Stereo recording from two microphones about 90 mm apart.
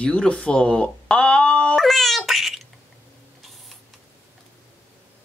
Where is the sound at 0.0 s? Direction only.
10° left (ahead or behind).